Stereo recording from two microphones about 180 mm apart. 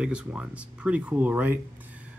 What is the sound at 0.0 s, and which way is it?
Speech, 5° right (ahead or behind).